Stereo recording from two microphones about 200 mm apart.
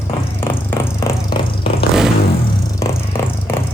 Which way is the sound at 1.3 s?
25° left (ahead or behind).